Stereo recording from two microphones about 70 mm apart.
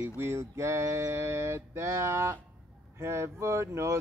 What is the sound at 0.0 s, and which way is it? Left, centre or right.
Mantra, right.